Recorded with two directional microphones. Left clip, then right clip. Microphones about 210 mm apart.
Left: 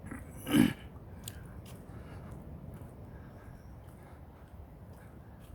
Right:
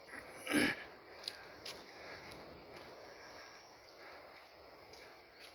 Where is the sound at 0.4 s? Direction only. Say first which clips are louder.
Left 5 dB; 20° left (ahead or behind).